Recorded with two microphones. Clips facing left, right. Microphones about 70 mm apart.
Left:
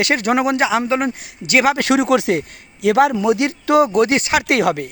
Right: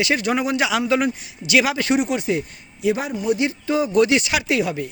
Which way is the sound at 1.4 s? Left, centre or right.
Left.